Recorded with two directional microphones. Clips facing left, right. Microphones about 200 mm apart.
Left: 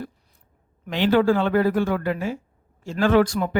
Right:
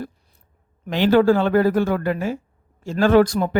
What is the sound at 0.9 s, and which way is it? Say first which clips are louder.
Speech: right 3 dB; 40° right (ahead or behind).